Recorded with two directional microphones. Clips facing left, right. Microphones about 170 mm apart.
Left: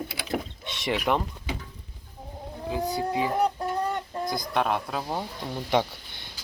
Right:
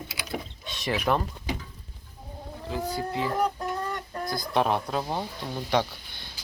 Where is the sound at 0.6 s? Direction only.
20° left (ahead or behind).